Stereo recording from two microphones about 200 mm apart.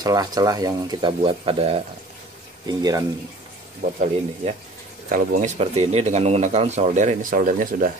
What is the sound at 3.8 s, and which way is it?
Speech, 40° right (ahead or behind).